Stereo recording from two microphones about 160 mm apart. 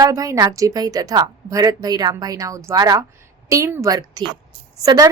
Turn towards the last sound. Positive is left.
turn(degrees=-20)  # may be behind; listen again after turning